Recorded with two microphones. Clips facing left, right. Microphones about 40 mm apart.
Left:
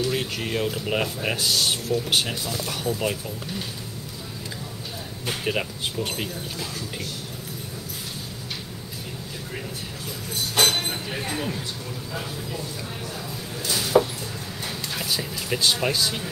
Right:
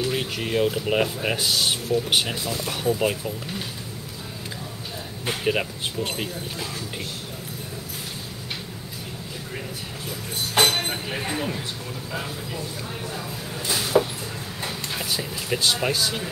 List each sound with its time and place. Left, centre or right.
0.1 s speech: centre
5.3 s speech: centre
10.6 s speech: right
13.6 s a sound: right
14.9 s a sound: centre
15.1 s speech: centre